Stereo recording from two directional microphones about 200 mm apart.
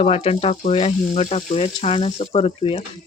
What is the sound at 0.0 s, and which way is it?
Speech, 30° left (ahead or behind).